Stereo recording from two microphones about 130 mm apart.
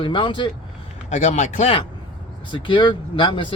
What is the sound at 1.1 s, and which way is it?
Speech, 70° left (ahead or behind).